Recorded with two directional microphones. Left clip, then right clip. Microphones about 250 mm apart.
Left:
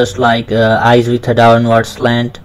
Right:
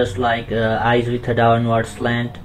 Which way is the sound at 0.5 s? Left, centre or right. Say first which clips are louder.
Left 8 dB; left.